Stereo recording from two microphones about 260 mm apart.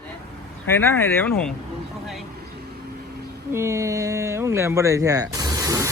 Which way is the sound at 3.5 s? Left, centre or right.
Centre.